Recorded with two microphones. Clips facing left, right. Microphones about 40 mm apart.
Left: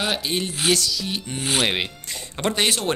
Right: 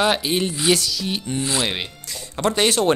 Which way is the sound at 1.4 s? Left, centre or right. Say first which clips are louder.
Left 3 dB; left.